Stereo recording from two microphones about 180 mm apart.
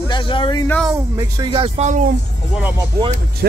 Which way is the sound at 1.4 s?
30° right (ahead or behind).